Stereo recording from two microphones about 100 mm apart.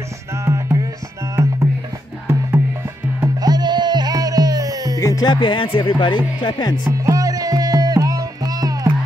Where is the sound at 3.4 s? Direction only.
45° right (ahead or behind).